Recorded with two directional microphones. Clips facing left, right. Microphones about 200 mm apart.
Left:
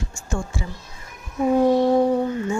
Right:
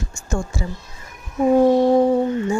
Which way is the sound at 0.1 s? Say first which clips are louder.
Right 3 dB; 45° right (ahead or behind).